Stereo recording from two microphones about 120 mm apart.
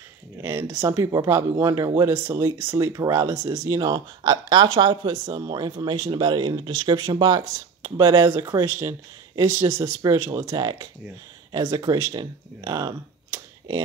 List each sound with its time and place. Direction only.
0.4 s speech: 20° right (ahead or behind)